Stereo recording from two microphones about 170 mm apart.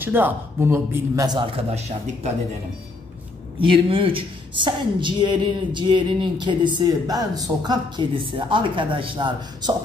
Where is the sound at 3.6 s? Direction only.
30° right (ahead or behind).